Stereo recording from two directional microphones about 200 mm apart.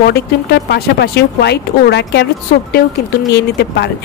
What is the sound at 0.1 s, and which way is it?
Speech, 55° left (ahead or behind).